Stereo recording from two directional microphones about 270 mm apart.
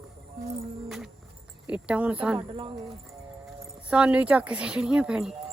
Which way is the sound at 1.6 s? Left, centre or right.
Centre.